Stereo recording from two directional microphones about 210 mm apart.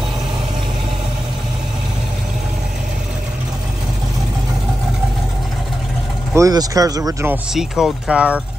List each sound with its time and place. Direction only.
6.3 s speech: 15° right (ahead or behind)
7.5 s speech: centre (ahead or behind)